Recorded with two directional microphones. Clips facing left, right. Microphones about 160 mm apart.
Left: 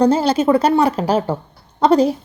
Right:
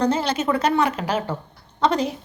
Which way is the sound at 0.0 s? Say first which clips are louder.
Left 7 dB; 35° left (ahead or behind).